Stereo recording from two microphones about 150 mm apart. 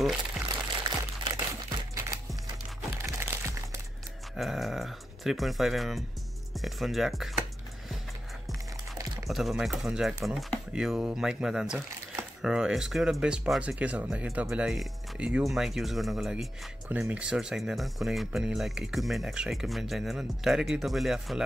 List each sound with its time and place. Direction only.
0.5 s pour: 30° right (ahead or behind)
3.2 s music: 15° right (ahead or behind)
4.4 s speech: centre (ahead or behind)
9.3 s speech: centre (ahead or behind)